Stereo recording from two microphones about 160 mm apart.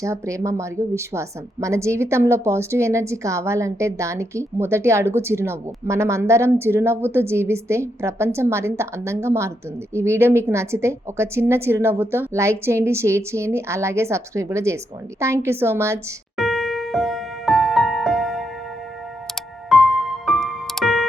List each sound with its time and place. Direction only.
0.0 s a woman's voice: 20° right (ahead or behind)
16.4 s music: centre (ahead or behind)
19.7 s music: centre (ahead or behind)